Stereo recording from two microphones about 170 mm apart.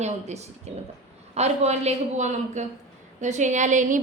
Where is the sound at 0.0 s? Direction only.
40° right (ahead or behind).